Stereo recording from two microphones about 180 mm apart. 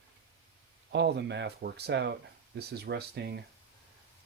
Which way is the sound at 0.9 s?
75° right (ahead or behind).